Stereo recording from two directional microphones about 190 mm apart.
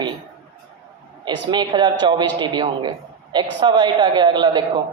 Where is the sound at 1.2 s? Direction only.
25° right (ahead or behind).